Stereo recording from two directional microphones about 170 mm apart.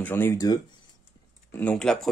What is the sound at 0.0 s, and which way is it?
Speech, 15° left (ahead or behind).